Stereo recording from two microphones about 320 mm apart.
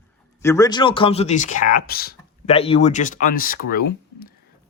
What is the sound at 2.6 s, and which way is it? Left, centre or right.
Speech, centre.